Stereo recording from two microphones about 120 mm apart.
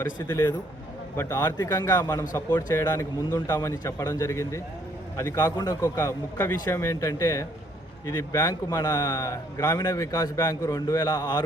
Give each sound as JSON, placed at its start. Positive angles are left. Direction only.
{"t": 0.0, "sound": "a man's voice", "side_deg": 20}